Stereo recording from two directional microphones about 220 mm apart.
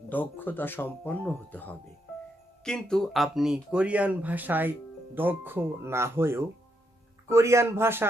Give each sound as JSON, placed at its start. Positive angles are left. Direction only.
{"t": 0.1, "sound": "speech", "side_deg": 10}